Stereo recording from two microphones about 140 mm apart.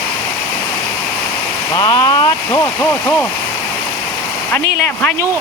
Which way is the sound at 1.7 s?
30° left (ahead or behind).